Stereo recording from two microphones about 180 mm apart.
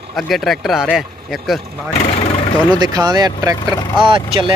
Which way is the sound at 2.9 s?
20° right (ahead or behind).